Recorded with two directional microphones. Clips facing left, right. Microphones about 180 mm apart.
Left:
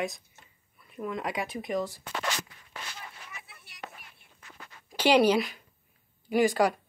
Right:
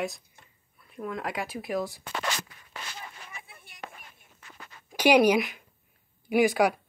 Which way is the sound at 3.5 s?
50° right (ahead or behind).